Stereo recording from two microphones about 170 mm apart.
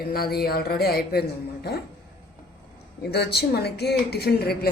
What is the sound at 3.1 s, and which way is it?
Speech, 70° left (ahead or behind).